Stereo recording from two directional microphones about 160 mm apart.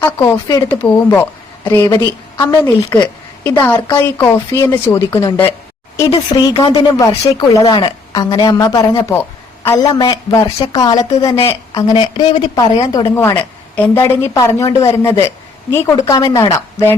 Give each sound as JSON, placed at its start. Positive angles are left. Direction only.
{"t": 0.0, "sound": "a woman's voice", "side_deg": 20}
{"t": 6.1, "sound": "a woman's voice", "side_deg": 25}
{"t": 13.3, "sound": "a woman's voice", "side_deg": 10}